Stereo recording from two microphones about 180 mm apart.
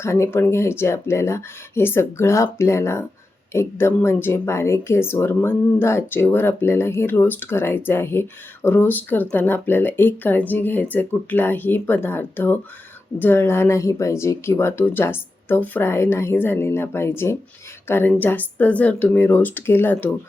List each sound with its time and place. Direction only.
0.0 s speech: 15° left (ahead or behind)